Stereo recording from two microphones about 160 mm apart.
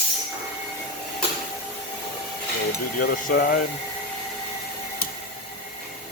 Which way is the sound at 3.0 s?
60° left (ahead or behind).